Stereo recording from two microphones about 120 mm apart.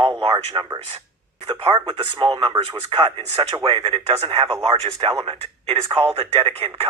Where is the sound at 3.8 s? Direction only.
40° right (ahead or behind).